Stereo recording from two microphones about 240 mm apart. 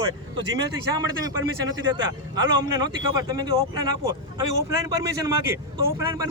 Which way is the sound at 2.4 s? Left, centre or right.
Centre.